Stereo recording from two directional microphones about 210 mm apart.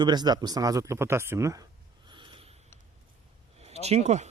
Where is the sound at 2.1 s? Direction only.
25° right (ahead or behind).